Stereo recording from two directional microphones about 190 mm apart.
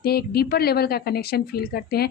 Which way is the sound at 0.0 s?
55° left (ahead or behind).